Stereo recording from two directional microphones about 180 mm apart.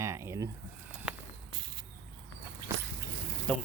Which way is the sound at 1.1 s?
5° right (ahead or behind).